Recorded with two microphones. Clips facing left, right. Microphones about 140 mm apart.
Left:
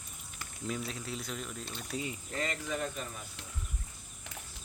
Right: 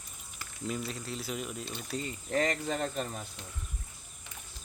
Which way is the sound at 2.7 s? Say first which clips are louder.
Right 3 dB; 70° right (ahead or behind).